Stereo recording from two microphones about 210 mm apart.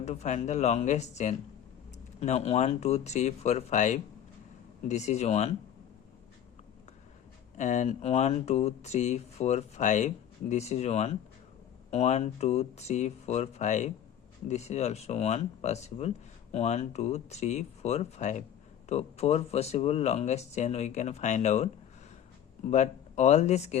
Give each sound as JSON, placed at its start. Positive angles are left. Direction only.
{"t": 0.0, "sound": "speech", "side_deg": 30}
{"t": 7.5, "sound": "speech", "side_deg": 35}
{"t": 22.7, "sound": "speech", "side_deg": 35}